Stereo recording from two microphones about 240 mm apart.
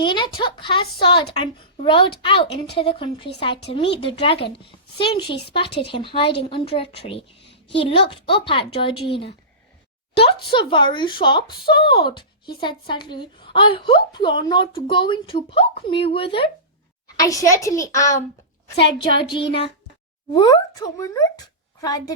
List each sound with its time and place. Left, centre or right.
0.0 s a woman's voice: centre
10.5 s a woman's voice: left
20.3 s speech: centre